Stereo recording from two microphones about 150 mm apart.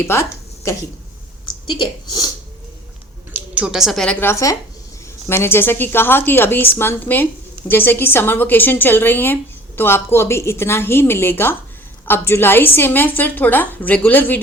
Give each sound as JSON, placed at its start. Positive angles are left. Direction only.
{"t": 0.0, "sound": "a woman's voice", "side_deg": 20}
{"t": 1.7, "sound": "speech", "side_deg": 30}
{"t": 3.3, "sound": "a woman's voice", "side_deg": -10}